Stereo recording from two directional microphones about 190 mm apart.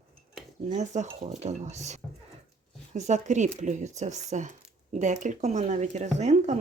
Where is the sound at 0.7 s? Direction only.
40° right (ahead or behind).